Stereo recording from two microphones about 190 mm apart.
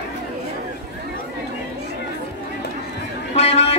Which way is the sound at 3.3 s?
35° left (ahead or behind).